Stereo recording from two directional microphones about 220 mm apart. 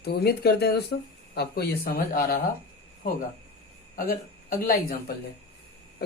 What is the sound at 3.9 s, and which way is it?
Speech, 40° left (ahead or behind).